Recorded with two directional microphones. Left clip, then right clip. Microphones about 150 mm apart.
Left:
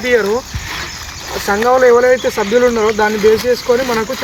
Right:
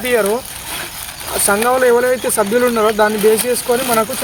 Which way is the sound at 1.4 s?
20° right (ahead or behind).